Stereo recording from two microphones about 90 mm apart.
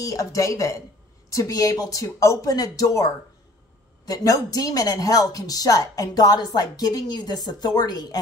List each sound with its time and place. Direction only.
0.0 s speech: 35° left (ahead or behind)